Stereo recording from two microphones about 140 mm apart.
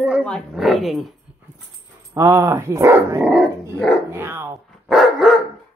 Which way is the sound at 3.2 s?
Centre (ahead or behind).